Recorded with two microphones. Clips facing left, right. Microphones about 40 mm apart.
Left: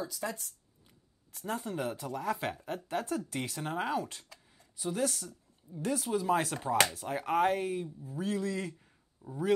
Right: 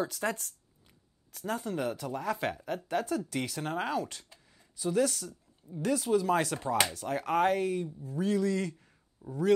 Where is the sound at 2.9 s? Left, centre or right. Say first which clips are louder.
Right 3 dB; right.